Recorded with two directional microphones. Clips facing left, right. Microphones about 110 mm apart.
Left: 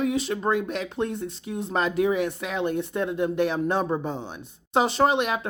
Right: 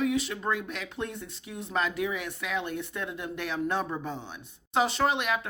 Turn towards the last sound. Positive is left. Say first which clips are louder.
# left 5 dB
turn(degrees=25)  # may be behind; listen again after turning